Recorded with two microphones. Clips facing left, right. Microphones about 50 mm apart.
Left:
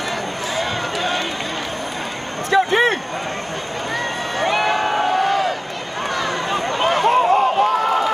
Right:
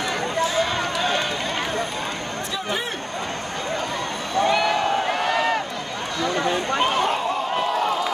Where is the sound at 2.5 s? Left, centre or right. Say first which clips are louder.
Left 14 dB; left.